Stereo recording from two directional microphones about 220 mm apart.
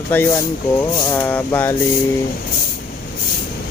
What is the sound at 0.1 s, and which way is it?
Speech, 10° left (ahead or behind).